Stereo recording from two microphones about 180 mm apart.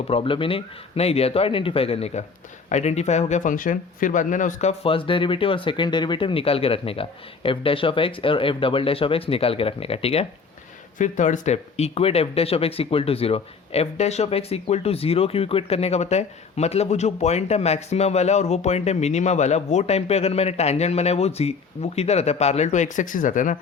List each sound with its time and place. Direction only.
0.1 s speech: 30° left (ahead or behind)
10.9 s speech: 45° left (ahead or behind)